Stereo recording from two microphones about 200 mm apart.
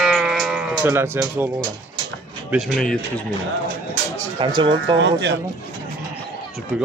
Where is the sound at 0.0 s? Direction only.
Centre (ahead or behind).